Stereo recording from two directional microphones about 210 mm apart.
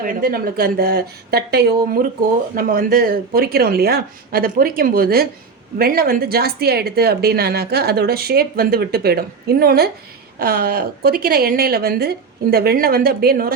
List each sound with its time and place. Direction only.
0.0 s speech: 45° right (ahead or behind)